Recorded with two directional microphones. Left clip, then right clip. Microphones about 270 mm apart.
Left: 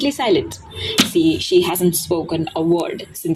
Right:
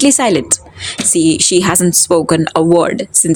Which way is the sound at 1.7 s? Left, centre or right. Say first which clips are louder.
Right 6 dB; right.